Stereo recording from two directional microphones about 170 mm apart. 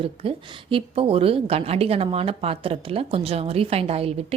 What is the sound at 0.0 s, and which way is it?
A woman's voice, 35° right (ahead or behind).